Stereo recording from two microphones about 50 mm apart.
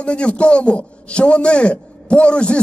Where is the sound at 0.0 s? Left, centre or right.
Left.